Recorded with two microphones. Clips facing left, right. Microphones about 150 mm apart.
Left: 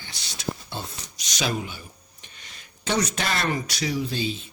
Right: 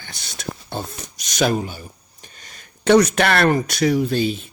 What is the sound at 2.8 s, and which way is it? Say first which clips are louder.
Speech: right 11 dB; 60° right (ahead or behind).